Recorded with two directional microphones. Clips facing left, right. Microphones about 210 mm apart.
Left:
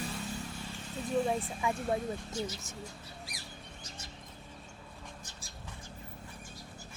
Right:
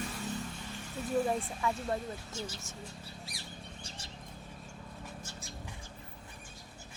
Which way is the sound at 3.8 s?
30° right (ahead or behind).